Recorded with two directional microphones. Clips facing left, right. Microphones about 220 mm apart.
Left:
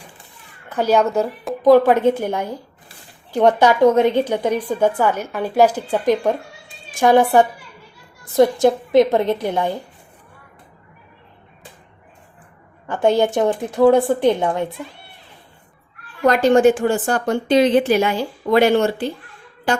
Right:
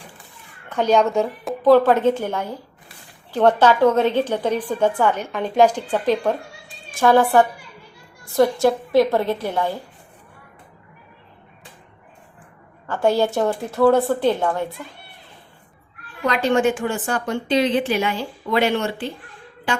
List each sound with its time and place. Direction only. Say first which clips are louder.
0.7 s a woman's voice: left 1 dB; 5° left (ahead or behind)
1.6 s a woman's voice: left 2 dB; 15° left (ahead or behind)
12.9 s a woman's voice: left 2 dB; 20° left (ahead or behind)
16.2 s a woman's voice: left 6 dB; 45° left (ahead or behind)